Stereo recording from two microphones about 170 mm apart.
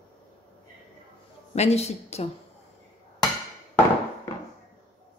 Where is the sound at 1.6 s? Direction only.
40° left (ahead or behind).